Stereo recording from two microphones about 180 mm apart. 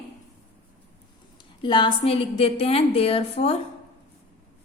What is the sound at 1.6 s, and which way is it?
A woman's voice, 25° left (ahead or behind).